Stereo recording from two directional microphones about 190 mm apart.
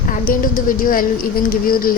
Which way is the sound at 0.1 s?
45° left (ahead or behind).